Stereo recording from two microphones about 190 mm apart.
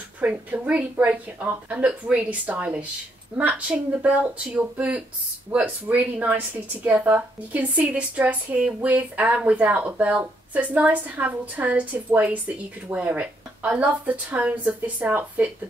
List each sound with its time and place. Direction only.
0.2 s speech: 5° right (ahead or behind)